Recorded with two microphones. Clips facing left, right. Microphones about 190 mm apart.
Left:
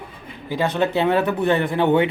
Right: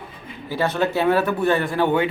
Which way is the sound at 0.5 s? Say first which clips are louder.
Left 1 dB; 15° left (ahead or behind).